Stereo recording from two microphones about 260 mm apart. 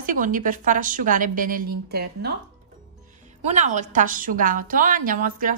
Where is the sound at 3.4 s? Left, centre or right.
Right.